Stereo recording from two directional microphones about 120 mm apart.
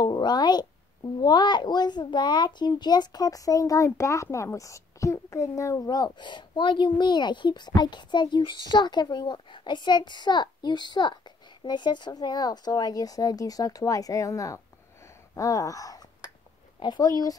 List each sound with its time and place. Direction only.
0.0 s a child's voice: 35° left (ahead or behind)
15.3 s a sound: 30° left (ahead or behind)
16.8 s a child's voice: 35° left (ahead or behind)